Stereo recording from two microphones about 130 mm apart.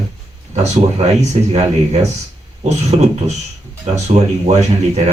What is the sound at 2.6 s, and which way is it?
Speech, 60° right (ahead or behind).